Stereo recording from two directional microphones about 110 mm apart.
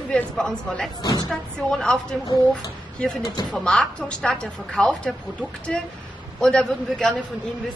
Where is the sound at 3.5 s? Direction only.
10° left (ahead or behind).